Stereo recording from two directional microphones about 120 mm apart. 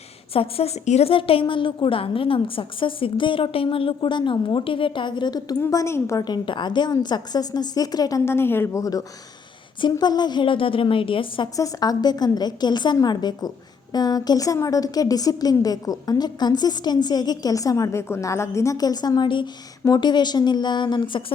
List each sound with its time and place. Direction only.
0.3 s a woman's voice: 55° left (ahead or behind); by 8.2 s 30° left (ahead or behind)
8.2 s a woman's voice: 20° left (ahead or behind); by 11.4 s 45° left (ahead or behind)
11.5 s a woman's voice: 30° left (ahead or behind)